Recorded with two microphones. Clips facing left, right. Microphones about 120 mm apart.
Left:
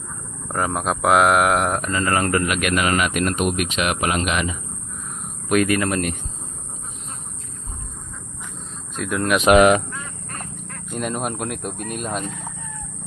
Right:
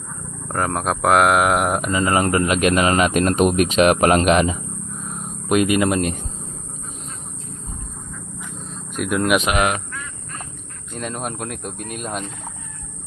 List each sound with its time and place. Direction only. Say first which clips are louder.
0.4 s speech: right 1 dB; centre (ahead or behind); by 4.4 s 45° right (ahead or behind)
5.5 s speech: right 2 dB; 20° right (ahead or behind)
9.0 s speech: right 2 dB; 5° right (ahead or behind)
10.9 s speech: left 2 dB; 5° left (ahead or behind)